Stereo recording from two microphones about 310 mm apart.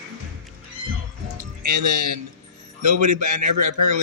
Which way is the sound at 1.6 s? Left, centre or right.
Right.